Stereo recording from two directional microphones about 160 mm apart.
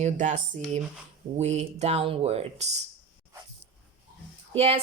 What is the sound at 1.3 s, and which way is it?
A woman's voice, 45° right (ahead or behind).